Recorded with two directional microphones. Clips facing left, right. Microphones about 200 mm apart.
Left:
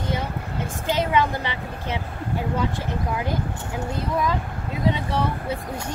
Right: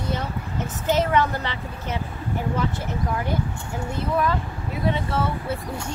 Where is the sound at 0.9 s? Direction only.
10° left (ahead or behind).